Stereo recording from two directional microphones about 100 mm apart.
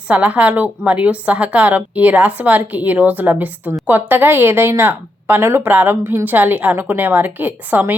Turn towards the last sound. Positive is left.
turn(degrees=-20)  # may be behind; listen again after turning